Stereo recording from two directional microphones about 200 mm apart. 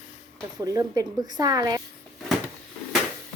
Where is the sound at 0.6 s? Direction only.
15° right (ahead or behind).